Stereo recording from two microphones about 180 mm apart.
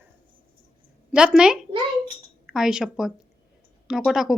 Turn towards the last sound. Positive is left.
turn(degrees=0)  # may be behind; listen again after turning